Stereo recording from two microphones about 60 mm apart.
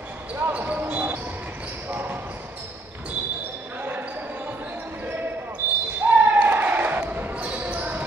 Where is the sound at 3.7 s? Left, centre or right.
Right.